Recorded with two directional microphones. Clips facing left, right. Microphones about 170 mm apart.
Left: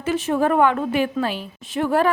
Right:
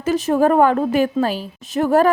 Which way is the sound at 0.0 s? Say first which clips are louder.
Right 4 dB; 40° right (ahead or behind).